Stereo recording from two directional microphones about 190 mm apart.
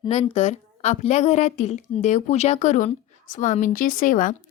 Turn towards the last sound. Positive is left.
turn(degrees=45)  # may be behind; listen again after turning